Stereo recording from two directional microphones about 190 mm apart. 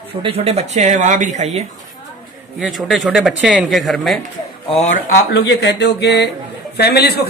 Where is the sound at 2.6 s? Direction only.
Centre (ahead or behind).